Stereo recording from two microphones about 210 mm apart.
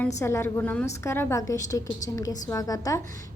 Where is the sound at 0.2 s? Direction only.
10° left (ahead or behind).